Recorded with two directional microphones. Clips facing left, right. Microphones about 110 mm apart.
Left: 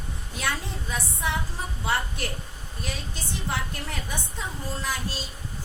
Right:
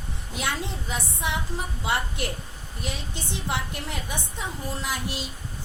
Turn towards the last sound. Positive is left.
turn(degrees=-20)  # may be behind; listen again after turning